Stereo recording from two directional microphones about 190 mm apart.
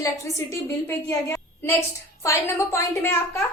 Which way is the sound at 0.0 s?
15° left (ahead or behind).